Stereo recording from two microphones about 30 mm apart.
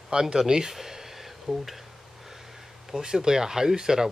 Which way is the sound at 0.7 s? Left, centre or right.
Centre.